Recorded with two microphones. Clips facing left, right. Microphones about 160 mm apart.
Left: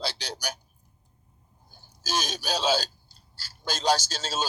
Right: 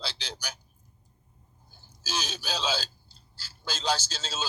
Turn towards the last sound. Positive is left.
turn(degrees=45)  # may be behind; listen again after turning